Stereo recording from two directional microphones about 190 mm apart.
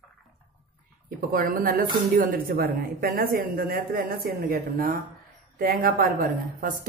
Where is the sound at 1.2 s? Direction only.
50° right (ahead or behind).